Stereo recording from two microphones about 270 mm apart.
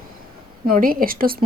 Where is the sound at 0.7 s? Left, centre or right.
Right.